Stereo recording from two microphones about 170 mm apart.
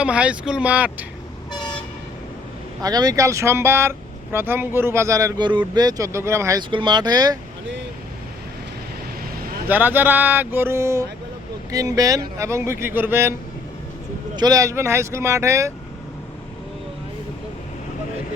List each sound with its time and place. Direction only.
0.0 s speech: 5° right (ahead or behind)
2.8 s speech: 20° right (ahead or behind)
9.6 s speech: 10° right (ahead or behind)
14.3 s speech: 20° right (ahead or behind)